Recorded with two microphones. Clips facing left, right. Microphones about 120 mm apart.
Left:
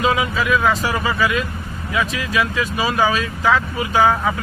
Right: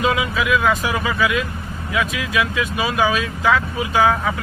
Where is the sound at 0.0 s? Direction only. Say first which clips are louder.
Left 1 dB; centre (ahead or behind).